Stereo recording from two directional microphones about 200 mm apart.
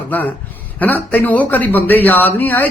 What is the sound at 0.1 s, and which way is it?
Speech, 10° left (ahead or behind).